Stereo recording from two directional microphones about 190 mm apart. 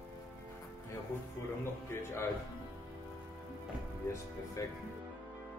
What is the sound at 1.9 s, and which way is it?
Speech, 15° left (ahead or behind).